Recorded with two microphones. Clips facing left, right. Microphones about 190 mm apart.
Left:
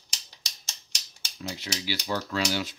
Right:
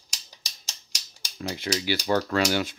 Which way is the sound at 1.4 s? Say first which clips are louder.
Right 6 dB; 55° right (ahead or behind).